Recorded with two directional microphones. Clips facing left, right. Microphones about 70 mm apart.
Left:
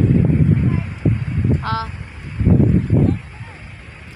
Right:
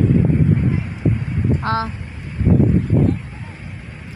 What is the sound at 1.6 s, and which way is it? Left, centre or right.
Speech, right.